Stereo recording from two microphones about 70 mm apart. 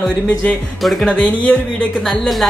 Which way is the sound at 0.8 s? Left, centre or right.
Centre.